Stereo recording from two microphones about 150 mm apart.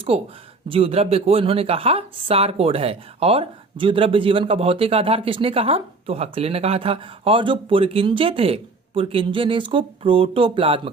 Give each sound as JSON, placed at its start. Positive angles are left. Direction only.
{"t": 0.1, "sound": "speech", "side_deg": -40}